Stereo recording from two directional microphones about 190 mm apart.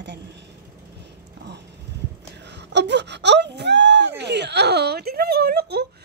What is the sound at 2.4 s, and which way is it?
Wail, 65° right (ahead or behind).